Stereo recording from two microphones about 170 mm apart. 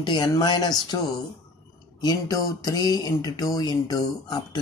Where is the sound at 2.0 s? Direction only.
20° left (ahead or behind).